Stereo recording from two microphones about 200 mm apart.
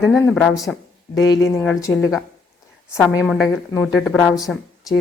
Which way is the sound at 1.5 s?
Centre (ahead or behind).